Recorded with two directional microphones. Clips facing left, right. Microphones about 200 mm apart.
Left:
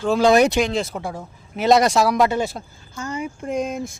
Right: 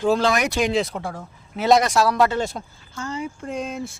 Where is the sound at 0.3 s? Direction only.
25° left (ahead or behind).